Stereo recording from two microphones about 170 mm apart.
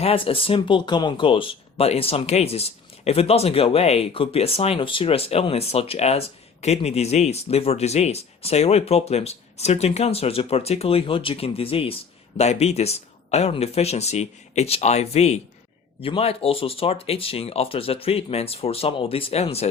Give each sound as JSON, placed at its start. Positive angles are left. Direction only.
{"t": 0.0, "sound": "speech", "side_deg": 35}